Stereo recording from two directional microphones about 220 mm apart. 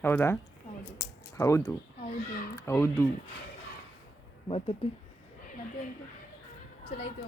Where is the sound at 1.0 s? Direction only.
15° left (ahead or behind).